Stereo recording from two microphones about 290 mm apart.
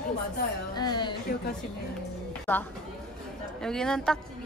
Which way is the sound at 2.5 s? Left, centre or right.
Centre.